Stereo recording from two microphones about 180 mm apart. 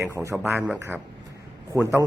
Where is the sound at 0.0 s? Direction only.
15° right (ahead or behind).